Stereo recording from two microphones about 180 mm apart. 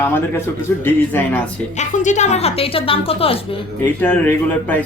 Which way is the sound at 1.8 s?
40° left (ahead or behind).